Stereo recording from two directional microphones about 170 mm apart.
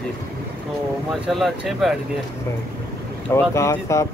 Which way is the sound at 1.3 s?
Centre (ahead or behind).